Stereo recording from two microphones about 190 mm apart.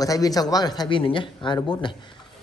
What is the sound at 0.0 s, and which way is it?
Speech, 20° left (ahead or behind).